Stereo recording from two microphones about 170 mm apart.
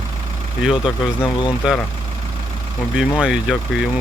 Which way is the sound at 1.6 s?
5° right (ahead or behind).